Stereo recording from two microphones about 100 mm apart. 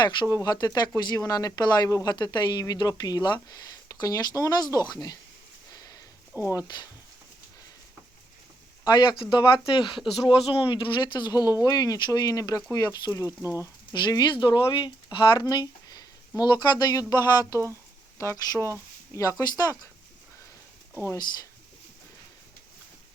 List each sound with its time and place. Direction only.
0.0 s speech: 40° left (ahead or behind)
5.7 s a sound: 40° left (ahead or behind)
6.3 s speech: 20° right (ahead or behind)
8.8 s speech: 45° left (ahead or behind)
13.2 s speech: 25° right (ahead or behind)
13.9 s speech: 45° left (ahead or behind)
18.2 s speech: 30° left (ahead or behind)